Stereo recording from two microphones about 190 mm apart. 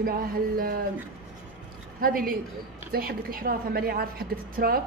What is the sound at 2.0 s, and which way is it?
A woman's voice, 50° right (ahead or behind).